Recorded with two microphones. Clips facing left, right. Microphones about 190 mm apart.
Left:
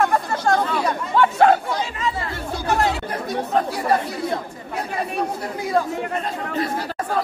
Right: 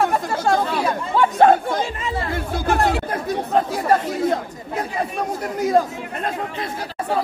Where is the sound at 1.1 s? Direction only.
20° right (ahead or behind).